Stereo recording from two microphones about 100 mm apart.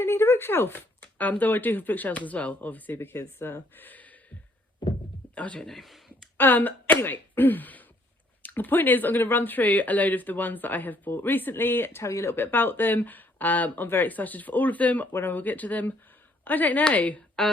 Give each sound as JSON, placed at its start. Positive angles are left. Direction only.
{"t": 0.0, "sound": "speech", "side_deg": 25}
{"t": 5.3, "sound": "a sound", "side_deg": 15}
{"t": 6.3, "sound": "a woman's voice", "side_deg": 20}